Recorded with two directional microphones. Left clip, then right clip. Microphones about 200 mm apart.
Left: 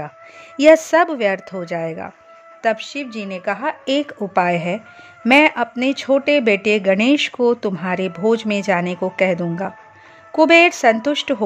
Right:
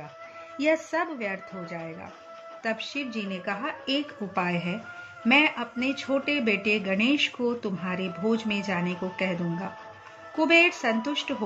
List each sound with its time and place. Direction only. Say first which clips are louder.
0.6 s a woman's voice: left 14 dB; 60° left (ahead or behind)